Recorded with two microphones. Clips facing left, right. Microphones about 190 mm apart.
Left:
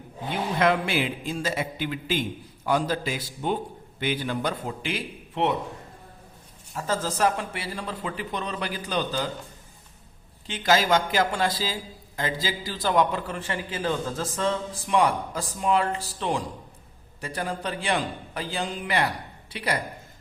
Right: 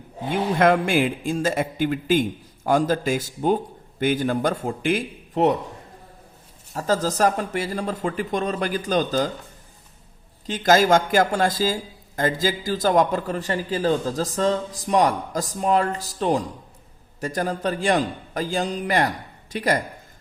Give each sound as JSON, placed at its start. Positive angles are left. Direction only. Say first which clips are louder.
{"t": 0.6, "sound": "speech", "louder": "right 5 dB", "side_deg": -50}
{"t": 6.7, "sound": "speech", "louder": "right 5 dB", "side_deg": -40}
{"t": 10.4, "sound": "a man's voice", "louder": "right 5 dB", "side_deg": -40}